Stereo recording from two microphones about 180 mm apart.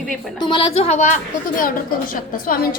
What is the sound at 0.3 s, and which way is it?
A woman's voice, 25° left (ahead or behind).